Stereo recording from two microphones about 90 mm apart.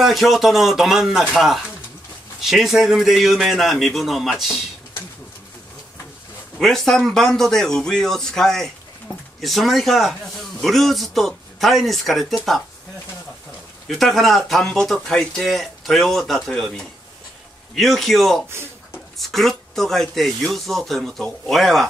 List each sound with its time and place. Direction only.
0.0 s speech: centre (ahead or behind)
6.6 s speech: 5° left (ahead or behind)
13.8 s speech: centre (ahead or behind)